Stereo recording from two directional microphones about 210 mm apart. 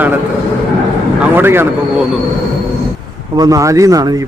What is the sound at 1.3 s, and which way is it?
Speech, 10° right (ahead or behind).